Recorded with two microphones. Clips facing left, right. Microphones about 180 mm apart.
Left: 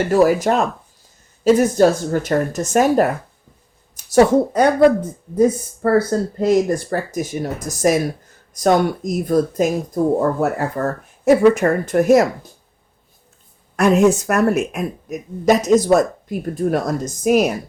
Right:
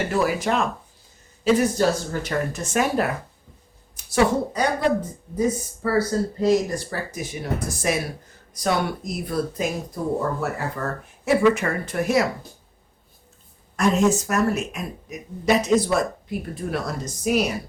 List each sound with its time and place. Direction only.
0.1 s speech: 45° left (ahead or behind)
13.7 s speech: 60° left (ahead or behind)